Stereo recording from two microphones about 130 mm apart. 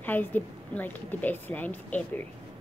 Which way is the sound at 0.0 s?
15° left (ahead or behind).